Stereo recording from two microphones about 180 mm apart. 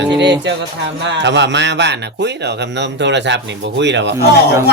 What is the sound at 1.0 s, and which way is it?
A man's voice, 80° right.